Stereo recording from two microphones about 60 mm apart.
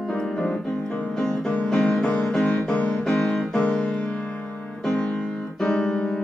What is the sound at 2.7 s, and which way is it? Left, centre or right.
Music, left.